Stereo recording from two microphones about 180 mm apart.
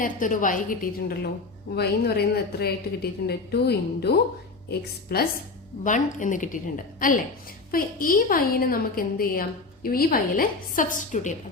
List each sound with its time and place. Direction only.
0.0 s a woman's voice: 45° left (ahead or behind); by 5.2 s 60° left (ahead or behind)
5.8 s a woman's voice: 45° left (ahead or behind)